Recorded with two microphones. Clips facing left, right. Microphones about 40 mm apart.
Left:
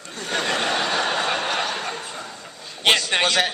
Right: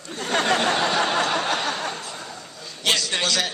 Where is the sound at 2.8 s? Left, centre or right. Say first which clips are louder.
Left 4 dB; left.